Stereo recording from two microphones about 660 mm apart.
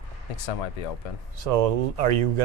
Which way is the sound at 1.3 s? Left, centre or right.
Right.